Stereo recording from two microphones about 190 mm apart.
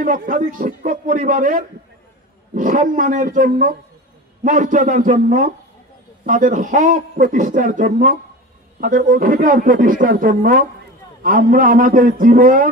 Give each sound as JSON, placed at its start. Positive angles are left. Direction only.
{"t": 0.0, "sound": "a man's voice", "side_deg": -45}